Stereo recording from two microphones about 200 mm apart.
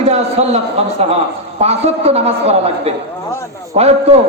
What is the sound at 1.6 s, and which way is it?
A man's voice, 30° right (ahead or behind).